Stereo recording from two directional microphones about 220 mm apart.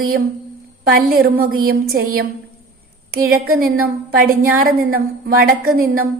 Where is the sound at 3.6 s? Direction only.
40° right (ahead or behind).